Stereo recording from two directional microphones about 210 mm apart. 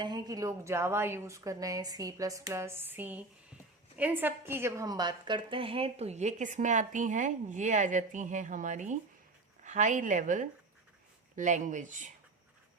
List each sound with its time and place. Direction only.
0.0 s a woman's voice: 20° right (ahead or behind); by 12.1 s 35° right (ahead or behind)